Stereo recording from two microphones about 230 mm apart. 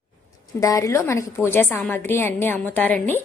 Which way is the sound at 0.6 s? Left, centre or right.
Centre.